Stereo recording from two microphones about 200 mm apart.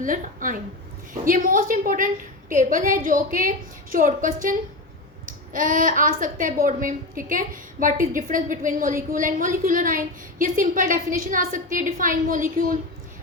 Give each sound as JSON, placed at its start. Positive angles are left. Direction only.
{"t": 0.0, "sound": "a woman's voice", "side_deg": -40}
{"t": 5.5, "sound": "a woman's voice", "side_deg": -40}